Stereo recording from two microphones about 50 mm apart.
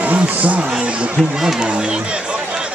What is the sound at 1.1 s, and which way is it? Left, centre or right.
Speech, centre.